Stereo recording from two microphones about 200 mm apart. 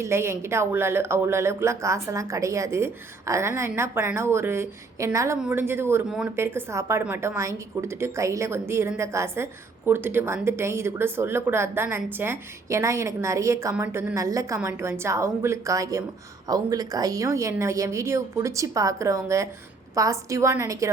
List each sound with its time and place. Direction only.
0.0 s a woman's voice: 10° right (ahead or behind)